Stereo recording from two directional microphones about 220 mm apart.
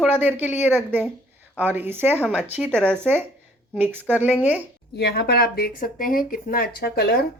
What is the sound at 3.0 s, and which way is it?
Speech, 10° right (ahead or behind).